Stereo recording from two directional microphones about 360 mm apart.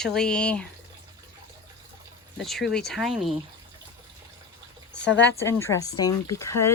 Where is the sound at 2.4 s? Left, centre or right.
Centre.